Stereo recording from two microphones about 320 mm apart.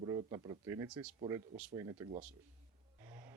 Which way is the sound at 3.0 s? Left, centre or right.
Centre.